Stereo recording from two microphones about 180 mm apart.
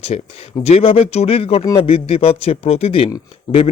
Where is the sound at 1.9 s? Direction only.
30° left (ahead or behind).